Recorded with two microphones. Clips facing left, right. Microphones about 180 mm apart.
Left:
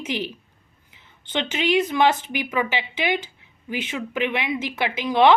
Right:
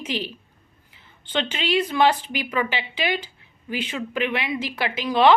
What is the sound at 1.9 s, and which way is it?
A woman's voice, 15° left (ahead or behind).